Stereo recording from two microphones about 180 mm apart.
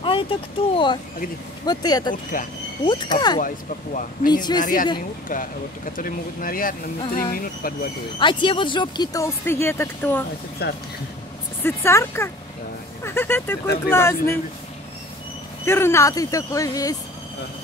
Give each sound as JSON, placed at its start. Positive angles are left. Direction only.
{"t": 0.0, "sound": "speech", "side_deg": 30}
{"t": 3.3, "sound": "speech", "side_deg": 45}
{"t": 5.3, "sound": "speech", "side_deg": 50}
{"t": 8.2, "sound": "speech", "side_deg": 25}
{"t": 10.6, "sound": "speech", "side_deg": 65}
{"t": 11.6, "sound": "speech", "side_deg": 15}
{"t": 15.6, "sound": "speech", "side_deg": 15}